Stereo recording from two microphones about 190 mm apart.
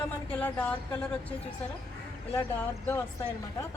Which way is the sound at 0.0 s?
5° left (ahead or behind).